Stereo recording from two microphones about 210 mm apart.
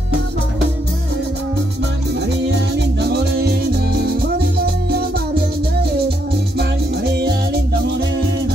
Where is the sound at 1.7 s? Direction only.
55° right (ahead or behind).